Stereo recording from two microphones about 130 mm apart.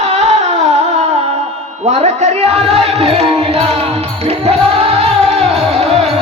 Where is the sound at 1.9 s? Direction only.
55° right (ahead or behind).